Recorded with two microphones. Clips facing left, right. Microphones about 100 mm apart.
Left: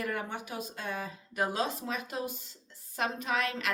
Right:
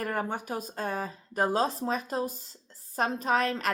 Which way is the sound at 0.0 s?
40° right (ahead or behind).